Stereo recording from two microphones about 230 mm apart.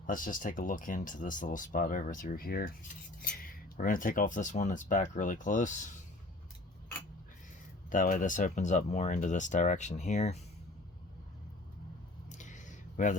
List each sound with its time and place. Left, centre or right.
0.0 s speech: left
7.9 s speech: left
12.3 s a sound: left